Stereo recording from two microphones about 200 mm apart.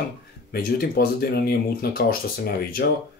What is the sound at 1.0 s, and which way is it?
Speech, 50° left (ahead or behind).